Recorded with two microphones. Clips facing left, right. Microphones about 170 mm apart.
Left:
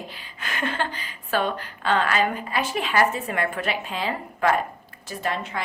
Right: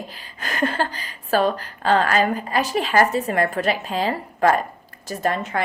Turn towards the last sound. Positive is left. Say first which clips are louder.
# right 5 dB
turn(degrees=-45)  # may be behind; listen again after turning